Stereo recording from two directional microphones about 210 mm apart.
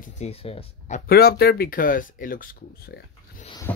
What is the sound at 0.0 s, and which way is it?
Speech, 30° left (ahead or behind).